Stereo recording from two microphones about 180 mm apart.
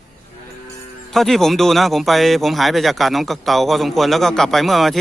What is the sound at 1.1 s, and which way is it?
Speech, centre (ahead or behind).